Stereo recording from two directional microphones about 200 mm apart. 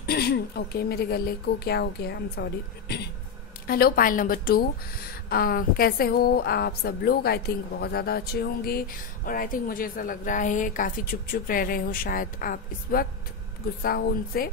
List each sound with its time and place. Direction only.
0.0 s a woman's voice: 50° left (ahead or behind)
3.6 s a woman's voice: 50° left (ahead or behind)